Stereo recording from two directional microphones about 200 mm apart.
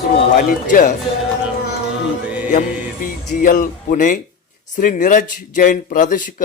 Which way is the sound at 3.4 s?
45° left (ahead or behind).